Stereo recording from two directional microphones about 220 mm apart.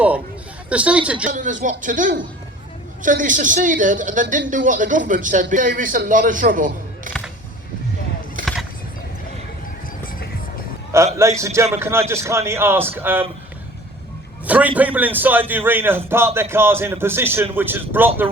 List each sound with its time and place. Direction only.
0.7 s a woman's voice: 5° right (ahead or behind)
1.3 s a man's voice: 35° right (ahead or behind)
8.4 s a sound: 35° right (ahead or behind)
10.9 s a man's voice: 15° right (ahead or behind)
14.4 s a man's voice: 5° right (ahead or behind)